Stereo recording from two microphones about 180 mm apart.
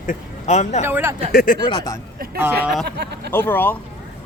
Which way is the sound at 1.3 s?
50° left (ahead or behind).